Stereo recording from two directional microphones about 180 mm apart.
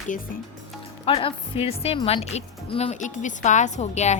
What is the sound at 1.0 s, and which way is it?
A woman's voice, 30° left (ahead or behind).